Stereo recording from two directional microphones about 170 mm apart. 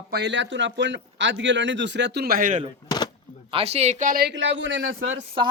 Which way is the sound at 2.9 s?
25° left (ahead or behind).